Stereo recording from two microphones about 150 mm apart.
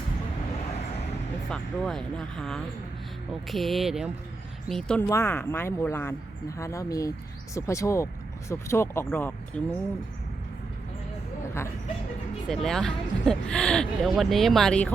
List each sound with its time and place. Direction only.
1.5 s speech: centre (ahead or behind)
5.0 s speech: 20° left (ahead or behind)
12.5 s speech: 5° left (ahead or behind)